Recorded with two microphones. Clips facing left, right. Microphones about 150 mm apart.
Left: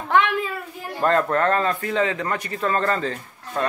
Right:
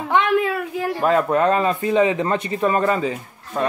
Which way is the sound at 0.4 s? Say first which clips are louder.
Right 7 dB; 80° right.